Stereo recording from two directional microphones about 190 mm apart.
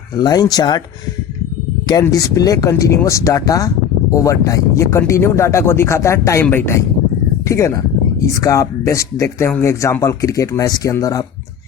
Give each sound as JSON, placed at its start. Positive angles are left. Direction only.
{"t": 0.2, "sound": "speech", "side_deg": 20}
{"t": 1.9, "sound": "speech", "side_deg": 20}